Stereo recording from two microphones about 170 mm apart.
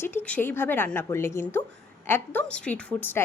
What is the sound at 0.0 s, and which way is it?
A woman's voice, 10° left (ahead or behind).